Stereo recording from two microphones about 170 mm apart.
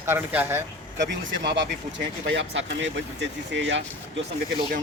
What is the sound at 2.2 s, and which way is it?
Speech, 90° right.